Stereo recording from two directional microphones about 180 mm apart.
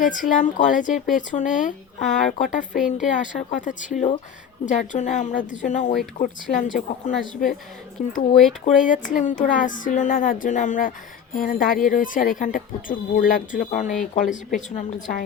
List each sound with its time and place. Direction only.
0.0 s speech: 45° left (ahead or behind)